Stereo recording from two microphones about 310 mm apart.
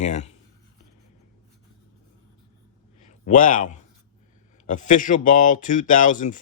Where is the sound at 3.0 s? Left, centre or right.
Left.